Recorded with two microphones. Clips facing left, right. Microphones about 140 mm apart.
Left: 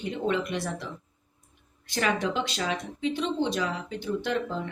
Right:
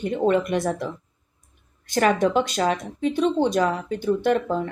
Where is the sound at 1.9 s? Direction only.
50° right (ahead or behind).